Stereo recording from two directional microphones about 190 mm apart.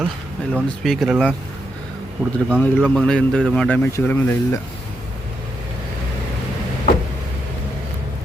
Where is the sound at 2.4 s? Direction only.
10° left (ahead or behind).